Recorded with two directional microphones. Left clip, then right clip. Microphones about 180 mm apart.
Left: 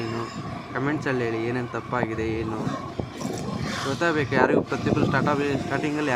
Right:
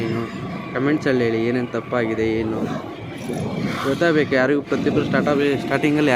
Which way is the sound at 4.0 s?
20° right (ahead or behind).